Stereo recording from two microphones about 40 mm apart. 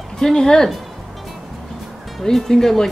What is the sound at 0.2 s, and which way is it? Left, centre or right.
Speech, centre.